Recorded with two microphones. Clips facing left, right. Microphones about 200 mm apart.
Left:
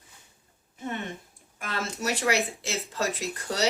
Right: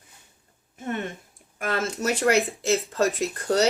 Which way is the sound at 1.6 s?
50° right (ahead or behind).